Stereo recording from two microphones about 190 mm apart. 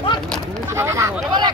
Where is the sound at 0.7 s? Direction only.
15° right (ahead or behind).